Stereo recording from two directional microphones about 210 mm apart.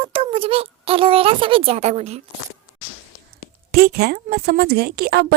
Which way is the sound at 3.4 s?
45° right (ahead or behind).